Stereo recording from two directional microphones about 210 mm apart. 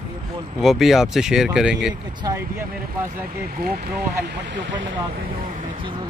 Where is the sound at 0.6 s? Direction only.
Centre (ahead or behind).